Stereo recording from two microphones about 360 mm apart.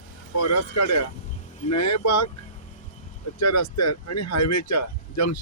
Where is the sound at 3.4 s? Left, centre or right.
Left.